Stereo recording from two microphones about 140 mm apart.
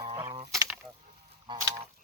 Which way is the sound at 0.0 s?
30° right (ahead or behind).